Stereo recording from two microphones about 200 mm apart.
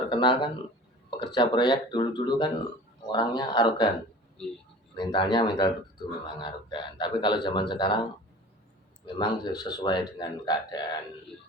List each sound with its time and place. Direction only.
0.1 s a man's voice: 25° left (ahead or behind)
4.9 s a man's voice: 20° left (ahead or behind)
9.1 s a man's voice: 20° left (ahead or behind)